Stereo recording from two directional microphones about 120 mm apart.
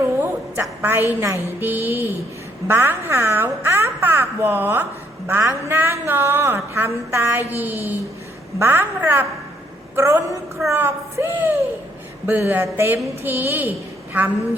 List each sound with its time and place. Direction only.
0.6 s a woman's voice: 20° right (ahead or behind)